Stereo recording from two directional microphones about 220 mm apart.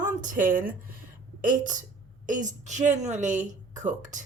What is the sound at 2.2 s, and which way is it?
A woman's voice, 35° right (ahead or behind).